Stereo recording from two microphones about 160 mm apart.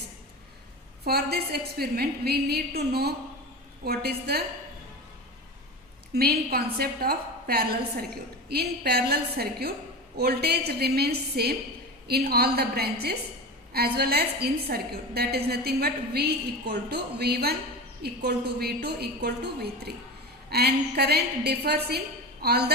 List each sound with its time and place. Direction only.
1.0 s a woman's voice: 80° right
6.1 s a woman's voice: 75° right (ahead or behind)